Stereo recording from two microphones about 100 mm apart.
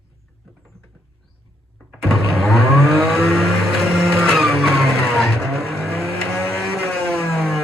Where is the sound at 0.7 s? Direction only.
80° right.